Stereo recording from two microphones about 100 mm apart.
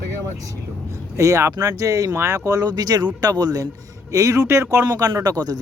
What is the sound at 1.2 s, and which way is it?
A man's voice, 30° right (ahead or behind).